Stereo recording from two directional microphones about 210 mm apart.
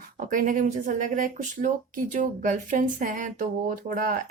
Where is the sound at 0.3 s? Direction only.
40° right (ahead or behind).